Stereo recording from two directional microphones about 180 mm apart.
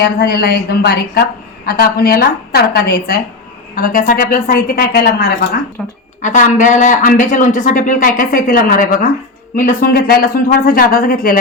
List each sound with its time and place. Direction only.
0.0 s a woman's voice: 60° left (ahead or behind)
3.8 s a woman's voice: 50° left (ahead or behind)
6.2 s a man's voice: 45° left (ahead or behind)